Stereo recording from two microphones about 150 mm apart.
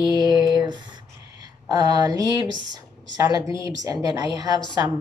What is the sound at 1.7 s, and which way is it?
A woman's voice, 25° right (ahead or behind).